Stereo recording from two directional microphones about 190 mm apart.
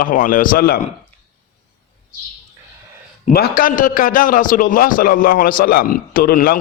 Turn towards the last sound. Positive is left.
turn(degrees=50)  # may be behind; listen again after turning